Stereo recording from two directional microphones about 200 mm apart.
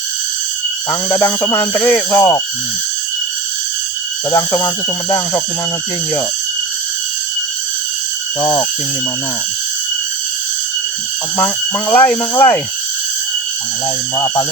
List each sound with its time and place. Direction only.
0.9 s speech: 15° left (ahead or behind)
4.3 s speech: 15° left (ahead or behind)
8.4 s speech: 15° left (ahead or behind)
11.3 s speech: 10° left (ahead or behind)